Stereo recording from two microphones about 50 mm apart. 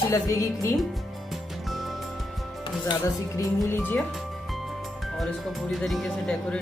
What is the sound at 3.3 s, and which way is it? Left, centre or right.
Speech, left.